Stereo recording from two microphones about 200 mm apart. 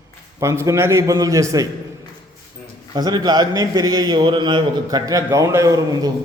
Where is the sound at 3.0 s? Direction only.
20° right (ahead or behind).